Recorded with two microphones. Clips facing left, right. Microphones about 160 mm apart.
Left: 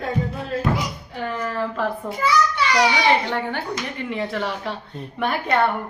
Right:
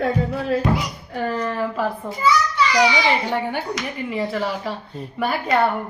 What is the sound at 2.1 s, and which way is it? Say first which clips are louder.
Speech: left 1 dB; centre (ahead or behind).